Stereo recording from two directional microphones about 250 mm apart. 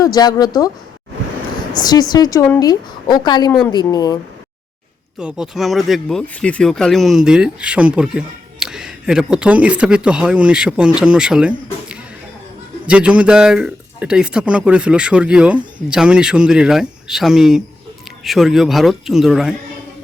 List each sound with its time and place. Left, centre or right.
0.0 s a woman's voice: centre
1.8 s a woman's voice: centre
5.2 s speech: centre